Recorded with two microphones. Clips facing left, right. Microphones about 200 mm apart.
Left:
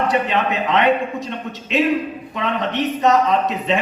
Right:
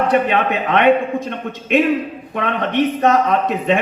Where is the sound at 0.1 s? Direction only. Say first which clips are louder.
Right 3 dB; 55° right (ahead or behind).